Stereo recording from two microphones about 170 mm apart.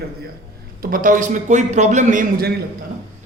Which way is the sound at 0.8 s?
55° right (ahead or behind).